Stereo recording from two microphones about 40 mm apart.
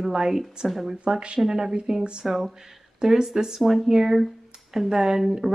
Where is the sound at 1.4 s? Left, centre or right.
Centre.